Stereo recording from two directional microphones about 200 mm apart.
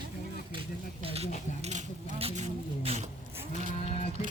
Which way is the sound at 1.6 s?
35° right (ahead or behind).